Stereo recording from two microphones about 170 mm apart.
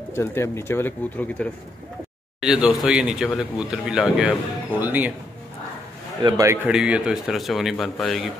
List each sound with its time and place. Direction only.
0.1 s speech: 15° left (ahead or behind)
2.4 s speech: 5° right (ahead or behind)
6.2 s a man's voice: 20° right (ahead or behind)
6.7 s speech: 5° right (ahead or behind)